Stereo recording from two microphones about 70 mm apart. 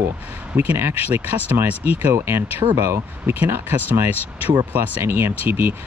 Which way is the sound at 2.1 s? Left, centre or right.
Right.